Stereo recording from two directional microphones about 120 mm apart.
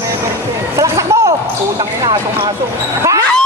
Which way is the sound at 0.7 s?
25° right (ahead or behind).